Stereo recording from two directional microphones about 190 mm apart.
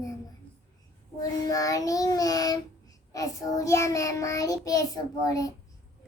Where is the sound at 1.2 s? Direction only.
20° left (ahead or behind).